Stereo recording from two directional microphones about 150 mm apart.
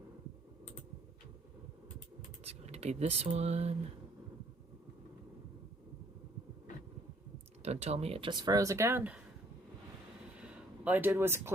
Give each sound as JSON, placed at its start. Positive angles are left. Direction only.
{"t": 2.4, "sound": "speech", "side_deg": -45}
{"t": 7.6, "sound": "speech", "side_deg": -45}
{"t": 10.3, "sound": "a sound", "side_deg": -10}